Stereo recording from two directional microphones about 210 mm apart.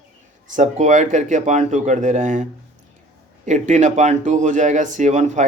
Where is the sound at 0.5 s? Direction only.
35° right (ahead or behind).